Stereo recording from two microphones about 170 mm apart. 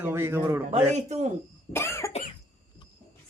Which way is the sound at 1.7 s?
15° left (ahead or behind).